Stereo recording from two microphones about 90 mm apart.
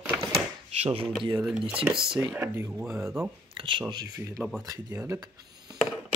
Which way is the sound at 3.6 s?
70° right (ahead or behind).